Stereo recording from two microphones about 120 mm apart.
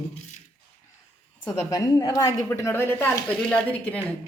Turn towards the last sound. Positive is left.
turn(degrees=15)  # may be behind; listen again after turning